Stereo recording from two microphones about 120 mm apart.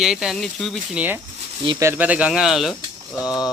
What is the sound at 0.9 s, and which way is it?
Speech, 10° right (ahead or behind).